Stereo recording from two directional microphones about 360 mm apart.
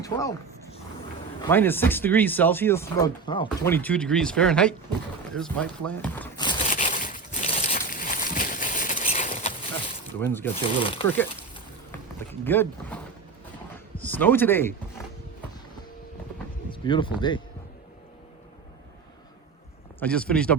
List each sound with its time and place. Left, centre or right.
0.0 s speech: centre
1.4 s speech: centre
5.3 s a sound: centre
10.2 s speech: centre
11.9 s boat: centre
13.7 s a sound: centre
16.6 s speech: centre
20.0 s speech: centre